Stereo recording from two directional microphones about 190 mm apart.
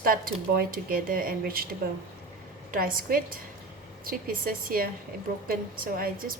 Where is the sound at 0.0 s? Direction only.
50° right (ahead or behind).